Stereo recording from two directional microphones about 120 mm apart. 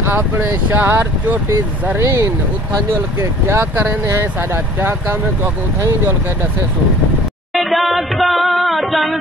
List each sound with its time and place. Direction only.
0.0 s speech: 15° right (ahead or behind)
7.5 s music: centre (ahead or behind)